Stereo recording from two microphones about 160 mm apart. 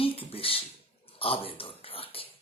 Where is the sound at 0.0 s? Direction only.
35° left (ahead or behind).